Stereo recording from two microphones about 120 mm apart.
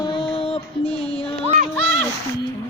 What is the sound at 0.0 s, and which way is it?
Music, 40° left (ahead or behind).